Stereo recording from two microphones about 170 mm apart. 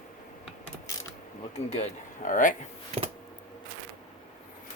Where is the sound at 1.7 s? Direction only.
45° left (ahead or behind).